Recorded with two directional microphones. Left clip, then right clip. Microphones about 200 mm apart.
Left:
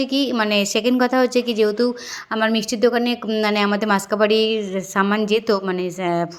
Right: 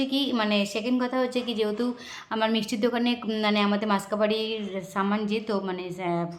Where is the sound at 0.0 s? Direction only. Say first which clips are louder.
Left 6 dB; 25° left (ahead or behind).